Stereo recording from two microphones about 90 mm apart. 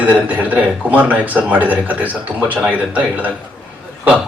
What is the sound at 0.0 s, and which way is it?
A man's voice, 15° right (ahead or behind).